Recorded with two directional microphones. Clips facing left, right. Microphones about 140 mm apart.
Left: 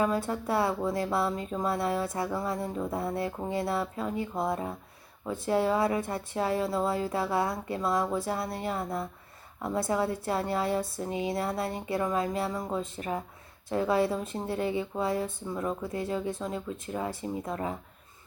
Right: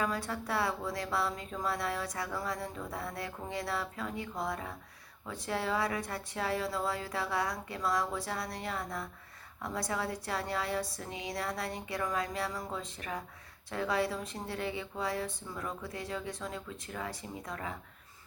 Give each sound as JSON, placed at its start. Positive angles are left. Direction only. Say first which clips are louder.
{"t": 0.0, "sound": "speech", "louder": "left 6 dB", "side_deg": 25}